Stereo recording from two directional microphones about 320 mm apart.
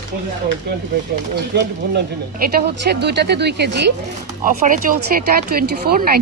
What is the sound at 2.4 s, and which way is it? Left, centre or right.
Speech, right.